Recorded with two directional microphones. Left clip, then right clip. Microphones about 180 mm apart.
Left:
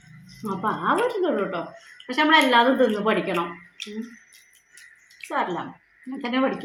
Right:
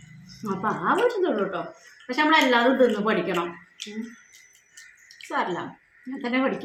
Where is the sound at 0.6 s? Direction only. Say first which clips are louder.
Even; 5° right (ahead or behind).